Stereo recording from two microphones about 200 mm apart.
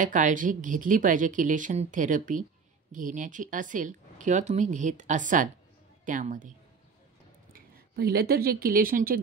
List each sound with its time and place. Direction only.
0.0 s a woman's voice: 40° right (ahead or behind)
7.5 s speech: 50° right (ahead or behind)